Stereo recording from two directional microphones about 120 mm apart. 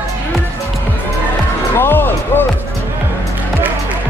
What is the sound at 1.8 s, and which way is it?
Music, 20° left (ahead or behind).